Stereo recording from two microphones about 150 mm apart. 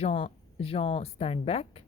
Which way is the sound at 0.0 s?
40° left (ahead or behind).